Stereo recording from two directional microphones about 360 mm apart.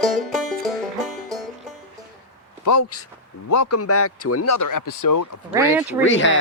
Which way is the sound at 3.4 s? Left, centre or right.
Left.